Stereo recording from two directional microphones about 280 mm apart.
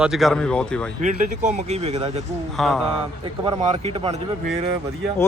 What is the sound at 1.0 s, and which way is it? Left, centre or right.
Speech, right.